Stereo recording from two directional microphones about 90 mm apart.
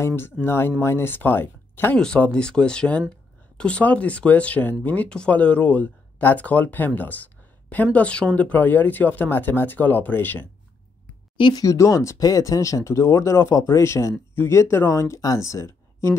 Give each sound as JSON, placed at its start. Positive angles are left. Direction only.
{"t": 0.0, "sound": "speech", "side_deg": 25}
{"t": 2.0, "sound": "speech", "side_deg": 10}
{"t": 11.3, "sound": "speech", "side_deg": 60}
{"t": 11.6, "sound": "speech", "side_deg": 35}